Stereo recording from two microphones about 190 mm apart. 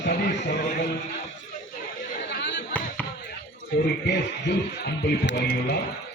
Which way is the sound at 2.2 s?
65° left (ahead or behind).